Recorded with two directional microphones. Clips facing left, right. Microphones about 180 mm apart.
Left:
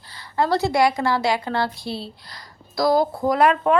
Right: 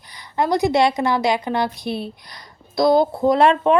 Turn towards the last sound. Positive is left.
turn(degrees=-25)  # may be behind; listen again after turning